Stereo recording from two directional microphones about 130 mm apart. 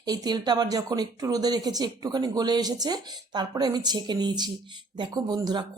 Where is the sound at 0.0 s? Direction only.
30° right (ahead or behind).